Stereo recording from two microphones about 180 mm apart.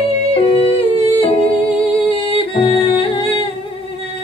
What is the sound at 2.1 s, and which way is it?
Humming, 30° left (ahead or behind).